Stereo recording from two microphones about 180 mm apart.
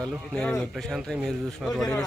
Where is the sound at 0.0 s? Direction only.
5° left (ahead or behind).